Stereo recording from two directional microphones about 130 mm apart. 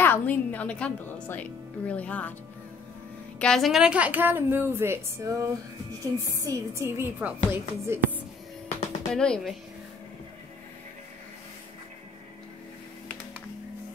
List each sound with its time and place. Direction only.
0.0 s a woman's voice: 15° left (ahead or behind)
3.3 s a woman's voice: 5° left (ahead or behind); by 8.1 s 15° right (ahead or behind)
8.6 s music: 5° left (ahead or behind)